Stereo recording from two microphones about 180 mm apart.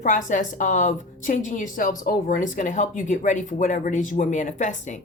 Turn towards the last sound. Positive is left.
turn(degrees=45)  # may be behind; listen again after turning